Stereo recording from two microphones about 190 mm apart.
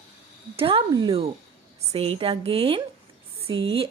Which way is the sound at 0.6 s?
30° right (ahead or behind).